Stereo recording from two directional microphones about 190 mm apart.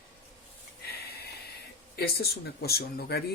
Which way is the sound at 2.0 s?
55° left (ahead or behind).